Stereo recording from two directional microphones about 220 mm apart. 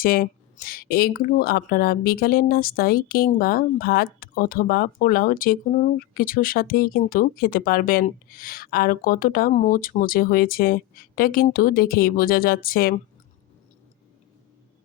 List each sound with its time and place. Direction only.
0.0 s speech: 40° left (ahead or behind)